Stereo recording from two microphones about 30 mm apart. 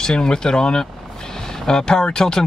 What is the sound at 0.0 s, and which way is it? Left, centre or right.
Speech, left.